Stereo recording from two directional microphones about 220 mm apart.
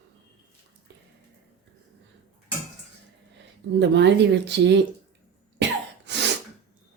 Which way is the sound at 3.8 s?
50° right (ahead or behind).